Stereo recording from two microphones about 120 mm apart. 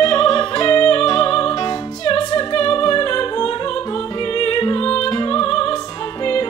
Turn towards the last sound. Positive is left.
turn(degrees=40)  # may be behind; listen again after turning